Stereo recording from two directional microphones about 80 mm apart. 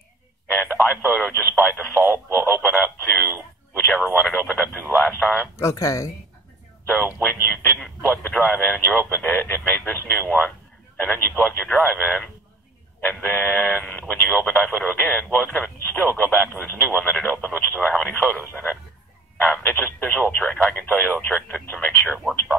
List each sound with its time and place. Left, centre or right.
0.5 s speech: left
2.6 s radio: centre
5.0 s a man's voice: centre
5.6 s speech: left
7.2 s speech: left
18.5 s radio: centre
19.3 s speech: left